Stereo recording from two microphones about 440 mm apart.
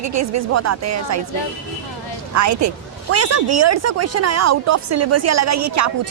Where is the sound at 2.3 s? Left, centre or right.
Right.